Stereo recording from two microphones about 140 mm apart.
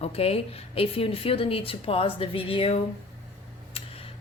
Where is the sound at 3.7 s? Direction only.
45° left (ahead or behind).